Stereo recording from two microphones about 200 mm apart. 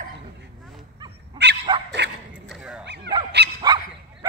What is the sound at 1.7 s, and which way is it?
Dog, 25° right (ahead or behind).